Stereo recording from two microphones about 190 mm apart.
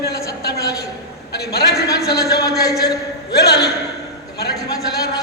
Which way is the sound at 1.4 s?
55° left (ahead or behind).